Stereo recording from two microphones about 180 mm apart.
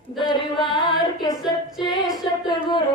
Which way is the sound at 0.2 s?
25° left (ahead or behind).